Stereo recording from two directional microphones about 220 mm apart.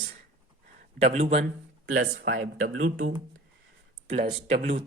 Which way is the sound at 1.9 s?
60° right (ahead or behind).